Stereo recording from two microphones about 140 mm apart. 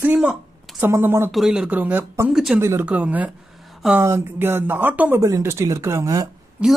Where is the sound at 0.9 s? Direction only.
20° right (ahead or behind).